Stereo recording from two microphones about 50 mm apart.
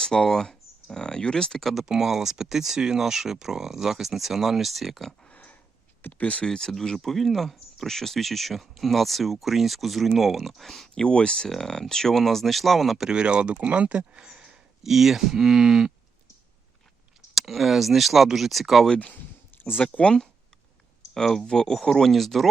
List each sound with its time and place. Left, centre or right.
0.0 s speech: centre
1.8 s speech: centre
5.3 s pig: left
6.0 s speech: left
6.4 s speech: centre
10.9 s speech: centre
13.1 s speech: right
14.3 s speech: centre
17.3 s speech: centre
19.8 s speech: left
21.1 s speech: centre